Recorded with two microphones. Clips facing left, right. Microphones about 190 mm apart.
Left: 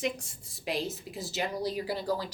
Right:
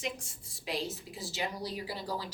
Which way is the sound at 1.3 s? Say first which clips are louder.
Left 5 dB; 50° left (ahead or behind).